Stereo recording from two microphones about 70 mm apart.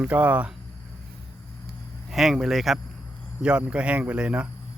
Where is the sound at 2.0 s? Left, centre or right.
Centre.